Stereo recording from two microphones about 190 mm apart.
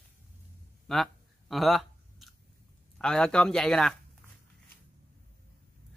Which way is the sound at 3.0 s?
5° left (ahead or behind).